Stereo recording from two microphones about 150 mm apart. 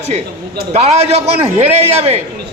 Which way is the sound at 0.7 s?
45° right (ahead or behind).